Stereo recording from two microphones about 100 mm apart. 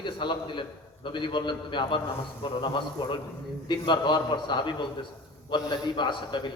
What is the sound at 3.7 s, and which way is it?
A man's voice, 50° left (ahead or behind).